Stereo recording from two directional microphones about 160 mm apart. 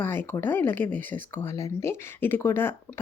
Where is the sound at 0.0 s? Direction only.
10° left (ahead or behind).